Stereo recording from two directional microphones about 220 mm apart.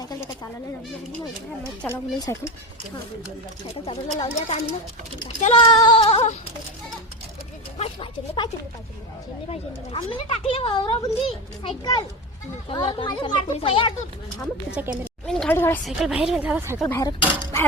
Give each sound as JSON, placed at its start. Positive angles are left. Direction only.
{"t": 2.3, "sound": "speech", "side_deg": 15}
{"t": 3.8, "sound": "speech", "side_deg": 25}
{"t": 7.8, "sound": "speech", "side_deg": 20}
{"t": 9.5, "sound": "speech", "side_deg": 25}
{"t": 14.8, "sound": "speech", "side_deg": -5}
{"t": 15.3, "sound": "speech", "side_deg": 5}
{"t": 15.8, "sound": "a woman's voice", "side_deg": 0}
{"t": 16.8, "sound": "speech", "side_deg": 10}